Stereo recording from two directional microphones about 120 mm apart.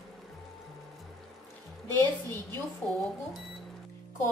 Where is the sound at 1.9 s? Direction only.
20° left (ahead or behind).